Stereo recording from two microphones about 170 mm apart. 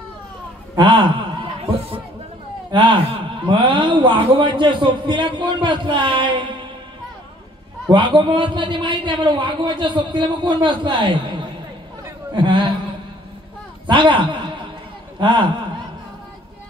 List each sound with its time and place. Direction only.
0.7 s a man's voice: 30° right (ahead or behind)
7.9 s a man's voice: 25° right (ahead or behind)
13.8 s a man's voice: 30° right (ahead or behind)